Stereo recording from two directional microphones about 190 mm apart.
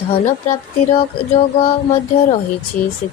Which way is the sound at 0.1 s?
40° left (ahead or behind).